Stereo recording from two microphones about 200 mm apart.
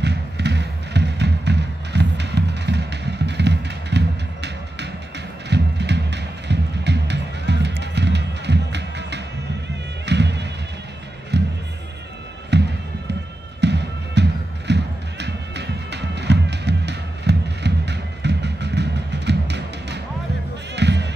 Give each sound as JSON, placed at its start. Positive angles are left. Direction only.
{"t": 0.0, "sound": "music", "side_deg": -60}
{"t": 12.5, "sound": "music", "side_deg": -55}